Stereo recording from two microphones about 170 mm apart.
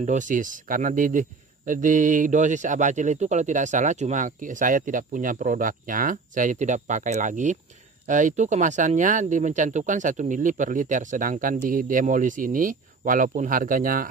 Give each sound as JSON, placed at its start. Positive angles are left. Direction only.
{"t": 0.0, "sound": "speech", "side_deg": -45}